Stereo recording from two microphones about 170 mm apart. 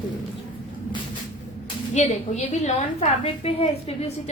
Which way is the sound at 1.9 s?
40° left (ahead or behind).